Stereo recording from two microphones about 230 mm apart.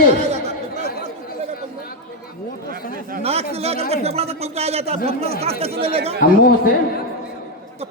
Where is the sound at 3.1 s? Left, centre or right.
Right.